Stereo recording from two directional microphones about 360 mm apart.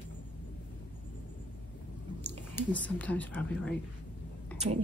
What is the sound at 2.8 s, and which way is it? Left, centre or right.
Speech, centre.